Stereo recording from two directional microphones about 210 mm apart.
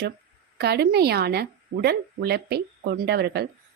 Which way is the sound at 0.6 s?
50° right (ahead or behind).